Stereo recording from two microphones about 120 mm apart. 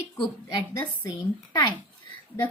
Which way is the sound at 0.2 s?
30° left (ahead or behind).